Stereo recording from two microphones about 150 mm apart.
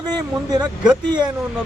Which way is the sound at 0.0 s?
25° right (ahead or behind).